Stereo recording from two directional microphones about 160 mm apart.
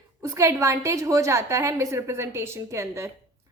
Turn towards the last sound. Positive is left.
turn(degrees=-20)  # may be behind; listen again after turning